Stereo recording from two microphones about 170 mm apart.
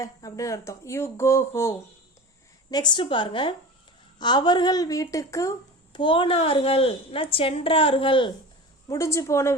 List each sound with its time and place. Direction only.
0.0 s a woman's voice: 20° left (ahead or behind)
8.9 s speech: 15° left (ahead or behind)